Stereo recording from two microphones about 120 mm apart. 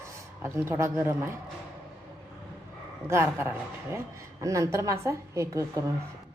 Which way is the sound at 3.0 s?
20° right (ahead or behind).